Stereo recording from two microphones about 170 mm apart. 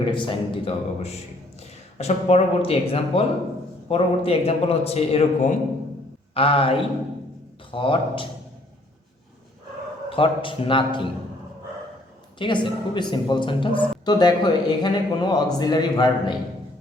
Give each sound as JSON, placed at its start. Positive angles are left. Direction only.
{"t": 0.0, "sound": "a man's voice", "side_deg": 30}
{"t": 10.1, "sound": "speech", "side_deg": 30}
{"t": 12.4, "sound": "speech", "side_deg": 30}